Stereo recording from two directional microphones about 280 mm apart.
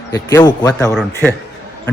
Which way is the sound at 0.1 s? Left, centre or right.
Centre.